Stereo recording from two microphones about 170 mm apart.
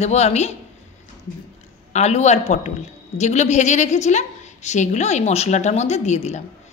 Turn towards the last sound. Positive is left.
turn(degrees=40)  # may be behind; listen again after turning